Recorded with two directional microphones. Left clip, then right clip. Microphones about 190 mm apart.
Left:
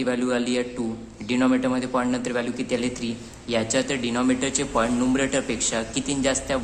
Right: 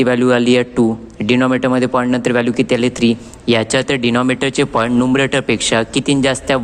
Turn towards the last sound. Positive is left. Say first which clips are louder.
# right 9 dB
turn(degrees=-40)  # may be behind; listen again after turning